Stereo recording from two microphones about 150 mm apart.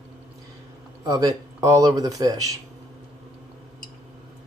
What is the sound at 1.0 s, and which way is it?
Speech, 25° right (ahead or behind).